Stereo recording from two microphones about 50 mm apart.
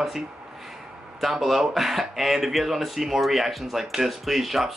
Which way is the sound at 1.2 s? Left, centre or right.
Centre.